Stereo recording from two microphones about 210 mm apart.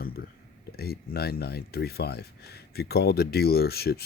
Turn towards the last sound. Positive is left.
turn(degrees=50)  # may be behind; listen again after turning